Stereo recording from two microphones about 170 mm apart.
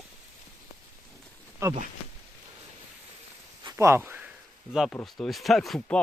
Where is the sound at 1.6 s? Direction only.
20° right (ahead or behind).